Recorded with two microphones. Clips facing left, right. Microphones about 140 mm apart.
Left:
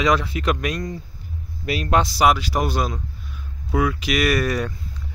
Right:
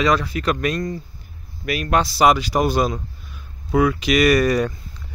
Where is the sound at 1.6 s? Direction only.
25° left (ahead or behind).